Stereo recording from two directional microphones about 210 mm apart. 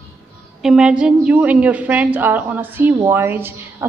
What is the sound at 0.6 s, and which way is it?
A woman's voice, 5° right (ahead or behind).